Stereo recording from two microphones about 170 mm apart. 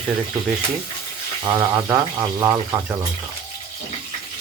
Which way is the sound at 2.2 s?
20° right (ahead or behind).